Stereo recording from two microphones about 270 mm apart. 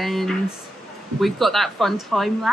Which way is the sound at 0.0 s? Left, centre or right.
Centre.